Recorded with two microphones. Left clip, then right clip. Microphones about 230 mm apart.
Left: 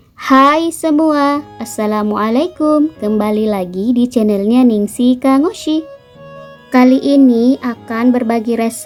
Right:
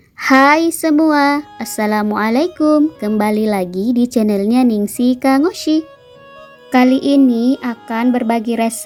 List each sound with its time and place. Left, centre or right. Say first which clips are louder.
0.2 s speech: left 1 dB; centre